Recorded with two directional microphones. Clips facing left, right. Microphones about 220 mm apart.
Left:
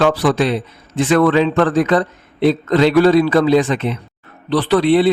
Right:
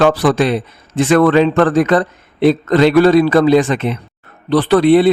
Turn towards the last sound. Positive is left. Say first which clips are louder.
# right 3 dB
turn(degrees=-50)  # may be behind; listen again after turning